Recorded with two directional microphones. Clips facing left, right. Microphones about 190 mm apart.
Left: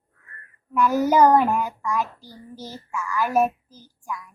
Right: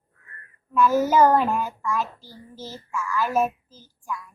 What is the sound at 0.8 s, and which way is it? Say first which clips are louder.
A child's voice: even; 15° left (ahead or behind).